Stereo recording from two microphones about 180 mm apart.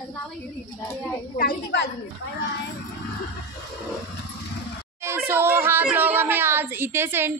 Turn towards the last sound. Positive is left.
turn(degrees=-10)  # may be behind; listen again after turning